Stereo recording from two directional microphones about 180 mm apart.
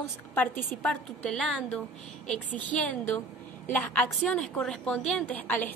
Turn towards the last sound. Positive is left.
turn(degrees=10)  # may be behind; listen again after turning